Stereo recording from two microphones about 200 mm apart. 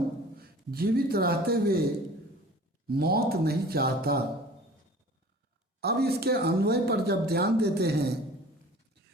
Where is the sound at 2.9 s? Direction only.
50° right (ahead or behind).